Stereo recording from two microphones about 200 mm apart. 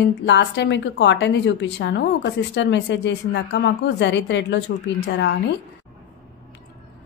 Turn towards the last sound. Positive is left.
turn(degrees=60)  # may be behind; listen again after turning